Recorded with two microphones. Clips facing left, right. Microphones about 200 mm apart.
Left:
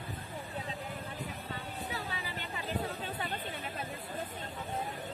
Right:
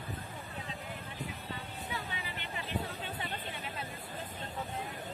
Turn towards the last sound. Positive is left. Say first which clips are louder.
# left 3 dB
turn(degrees=40)  # may be behind; listen again after turning